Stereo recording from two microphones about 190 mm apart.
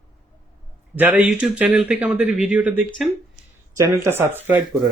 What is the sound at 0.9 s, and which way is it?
Speech, 10° right (ahead or behind).